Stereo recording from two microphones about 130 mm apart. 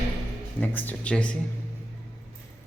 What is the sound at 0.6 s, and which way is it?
Speech, 10° left (ahead or behind).